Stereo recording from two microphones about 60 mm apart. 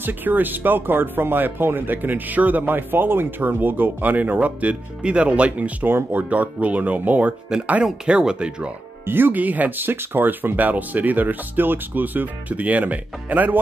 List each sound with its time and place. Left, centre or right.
0.0 s speech: right
5.9 s speech: right
6.3 s speech: right
7.8 s speech: centre
9.0 s speech: right